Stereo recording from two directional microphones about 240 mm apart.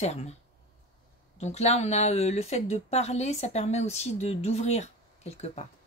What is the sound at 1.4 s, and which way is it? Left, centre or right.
Speech, left.